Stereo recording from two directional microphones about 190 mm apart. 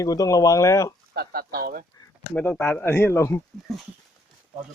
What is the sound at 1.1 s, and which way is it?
Speech, 55° right (ahead or behind).